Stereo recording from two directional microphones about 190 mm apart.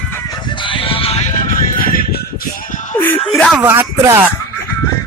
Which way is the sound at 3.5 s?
10° right (ahead or behind).